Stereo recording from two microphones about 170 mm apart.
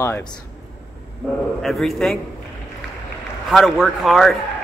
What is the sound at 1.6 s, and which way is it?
Speech, centre (ahead or behind).